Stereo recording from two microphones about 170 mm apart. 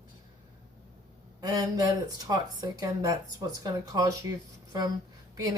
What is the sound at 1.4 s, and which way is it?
Speech, 25° right (ahead or behind).